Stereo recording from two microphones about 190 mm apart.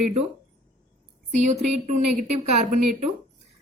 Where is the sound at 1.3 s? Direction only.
40° right (ahead or behind).